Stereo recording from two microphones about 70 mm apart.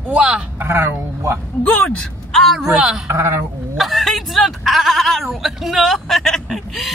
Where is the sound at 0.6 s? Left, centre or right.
Right.